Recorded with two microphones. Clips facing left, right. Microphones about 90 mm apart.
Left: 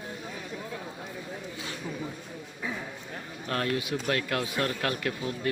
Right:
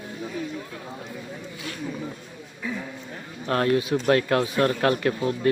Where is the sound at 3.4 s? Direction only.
40° right (ahead or behind).